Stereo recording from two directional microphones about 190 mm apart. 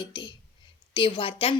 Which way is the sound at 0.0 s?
25° left (ahead or behind).